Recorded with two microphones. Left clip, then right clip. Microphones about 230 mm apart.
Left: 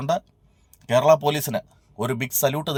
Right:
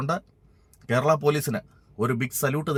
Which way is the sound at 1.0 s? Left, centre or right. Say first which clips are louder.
Left 3 dB; centre.